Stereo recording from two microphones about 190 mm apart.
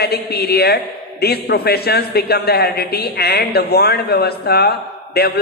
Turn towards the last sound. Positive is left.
turn(degrees=55)  # may be behind; listen again after turning